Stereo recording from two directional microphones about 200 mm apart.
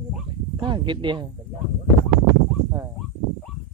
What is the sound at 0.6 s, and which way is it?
Speech, 25° right (ahead or behind).